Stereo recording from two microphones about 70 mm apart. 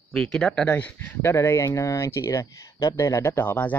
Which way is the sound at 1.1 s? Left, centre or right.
Left.